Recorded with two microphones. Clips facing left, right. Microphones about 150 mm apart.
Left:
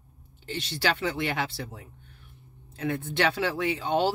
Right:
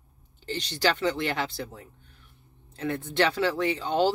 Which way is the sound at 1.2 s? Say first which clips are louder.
Right 1 dB; 10° left (ahead or behind).